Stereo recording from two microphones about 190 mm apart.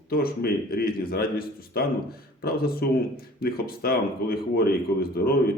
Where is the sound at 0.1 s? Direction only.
50° left (ahead or behind).